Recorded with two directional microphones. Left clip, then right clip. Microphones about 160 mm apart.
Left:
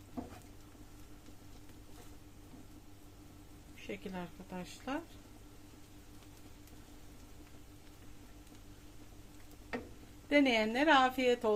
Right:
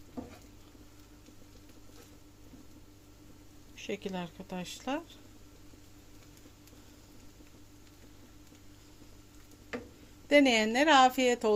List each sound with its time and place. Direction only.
3.8 s a woman's voice: 75° right (ahead or behind)
10.2 s a woman's voice: 65° right (ahead or behind)